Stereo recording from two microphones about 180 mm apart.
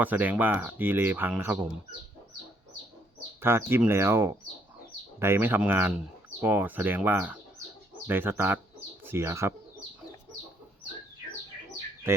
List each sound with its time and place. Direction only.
0.0 s speech: 10° right (ahead or behind)
3.4 s speech: 10° right (ahead or behind)